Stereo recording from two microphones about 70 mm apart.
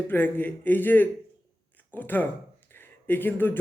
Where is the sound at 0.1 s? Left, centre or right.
Left.